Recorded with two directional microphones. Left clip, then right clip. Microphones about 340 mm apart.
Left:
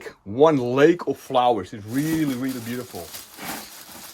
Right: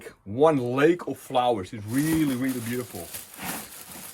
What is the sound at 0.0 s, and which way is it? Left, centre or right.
Speech, centre.